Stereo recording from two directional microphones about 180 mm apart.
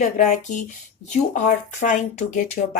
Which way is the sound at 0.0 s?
40° left (ahead or behind).